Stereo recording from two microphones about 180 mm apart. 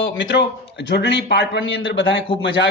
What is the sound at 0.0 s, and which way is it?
A man's voice, 80° left.